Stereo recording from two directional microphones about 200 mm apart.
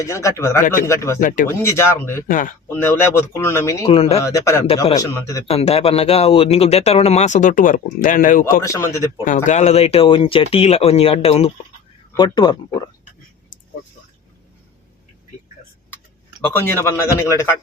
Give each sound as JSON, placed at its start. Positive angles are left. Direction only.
{"t": 0.0, "sound": "speech", "side_deg": 15}
{"t": 1.2, "sound": "speech", "side_deg": 40}
{"t": 1.5, "sound": "speech", "side_deg": 15}
{"t": 2.2, "sound": "speech", "side_deg": 40}
{"t": 2.6, "sound": "speech", "side_deg": 10}
{"t": 3.8, "sound": "speech", "side_deg": 30}
{"t": 4.2, "sound": "speech", "side_deg": 15}
{"t": 5.5, "sound": "speech", "side_deg": 30}
{"t": 8.6, "sound": "speech", "side_deg": 15}
{"t": 9.2, "sound": "speech", "side_deg": 40}
{"t": 16.5, "sound": "speech", "side_deg": 10}